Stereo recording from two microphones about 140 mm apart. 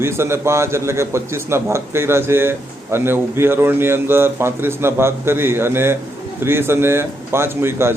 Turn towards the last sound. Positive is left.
turn(degrees=-15)  # may be behind; listen again after turning